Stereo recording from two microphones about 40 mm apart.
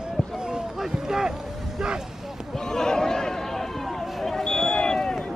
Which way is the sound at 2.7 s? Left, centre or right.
Centre.